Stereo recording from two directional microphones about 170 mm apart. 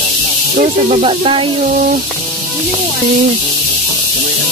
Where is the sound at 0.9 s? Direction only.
35° right (ahead or behind).